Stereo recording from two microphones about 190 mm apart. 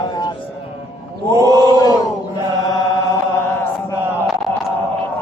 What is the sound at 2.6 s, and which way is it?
Chant, 15° left (ahead or behind).